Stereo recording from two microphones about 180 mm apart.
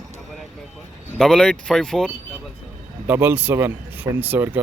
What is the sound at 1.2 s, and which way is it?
Speech, 5° left (ahead or behind).